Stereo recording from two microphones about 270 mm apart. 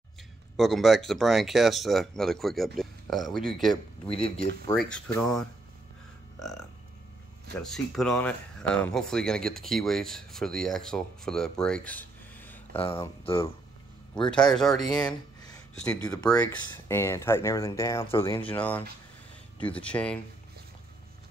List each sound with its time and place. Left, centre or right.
0.6 s speech: centre
4.7 s speech: centre
7.5 s speech: centre
12.7 s speech: centre
14.1 s speech: centre
16.0 s speech: centre